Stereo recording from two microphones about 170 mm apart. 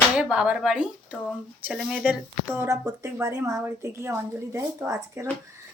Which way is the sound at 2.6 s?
15° right (ahead or behind).